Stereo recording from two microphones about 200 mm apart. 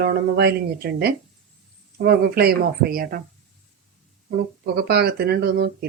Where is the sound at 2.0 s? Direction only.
50° right (ahead or behind).